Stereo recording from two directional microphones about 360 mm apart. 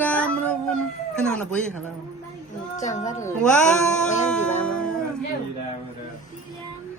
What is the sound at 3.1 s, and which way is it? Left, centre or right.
Speech, centre.